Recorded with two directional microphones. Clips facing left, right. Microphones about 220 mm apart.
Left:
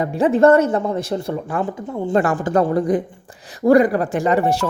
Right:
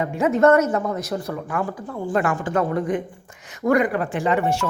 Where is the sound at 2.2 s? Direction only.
35° left (ahead or behind).